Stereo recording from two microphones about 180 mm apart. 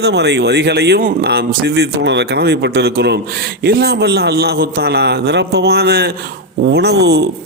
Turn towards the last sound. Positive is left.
turn(degrees=-65)  # may be behind; listen again after turning